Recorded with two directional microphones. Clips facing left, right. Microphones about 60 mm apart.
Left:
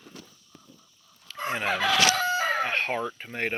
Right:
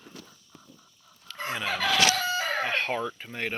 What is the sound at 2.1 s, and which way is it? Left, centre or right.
Chicken, left.